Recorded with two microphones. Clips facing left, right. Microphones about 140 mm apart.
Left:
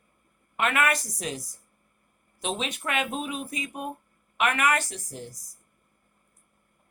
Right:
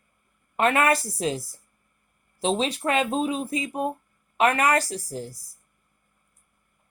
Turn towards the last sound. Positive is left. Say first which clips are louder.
# right 6 dB
turn(degrees=-30)  # may be behind; listen again after turning